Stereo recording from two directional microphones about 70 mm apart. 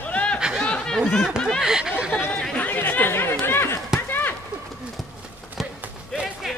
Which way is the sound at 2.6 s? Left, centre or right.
Left.